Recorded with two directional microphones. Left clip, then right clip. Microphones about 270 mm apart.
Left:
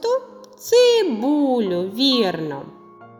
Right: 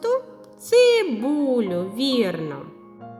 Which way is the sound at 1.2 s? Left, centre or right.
Centre.